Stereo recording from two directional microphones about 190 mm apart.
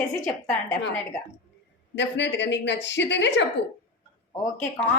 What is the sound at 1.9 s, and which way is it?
A woman's voice, 70° left (ahead or behind).